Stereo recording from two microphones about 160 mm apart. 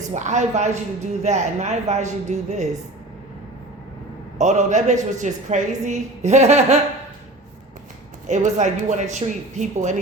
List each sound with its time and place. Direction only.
0.1 s a woman's voice: 50° right (ahead or behind)
4.4 s a woman's voice: 45° right (ahead or behind)
8.3 s a woman's voice: 50° right (ahead or behind)